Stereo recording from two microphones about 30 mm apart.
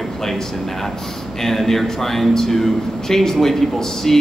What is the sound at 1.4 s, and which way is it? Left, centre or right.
A man's voice, centre.